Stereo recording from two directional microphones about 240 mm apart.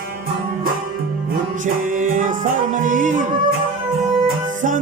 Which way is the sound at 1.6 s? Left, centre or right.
Right.